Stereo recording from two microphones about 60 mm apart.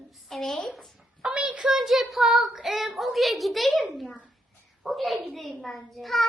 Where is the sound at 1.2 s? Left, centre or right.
Centre.